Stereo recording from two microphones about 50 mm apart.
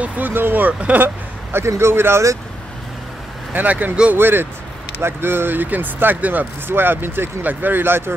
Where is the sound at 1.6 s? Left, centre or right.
Right.